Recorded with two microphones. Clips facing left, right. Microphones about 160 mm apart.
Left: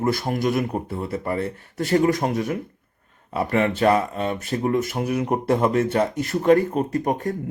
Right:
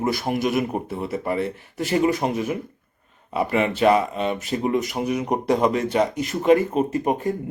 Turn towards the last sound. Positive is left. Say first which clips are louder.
# right 1 dB
turn(degrees=-20)  # may be behind; listen again after turning